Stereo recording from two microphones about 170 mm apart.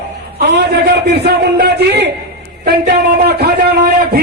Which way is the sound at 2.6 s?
90° right.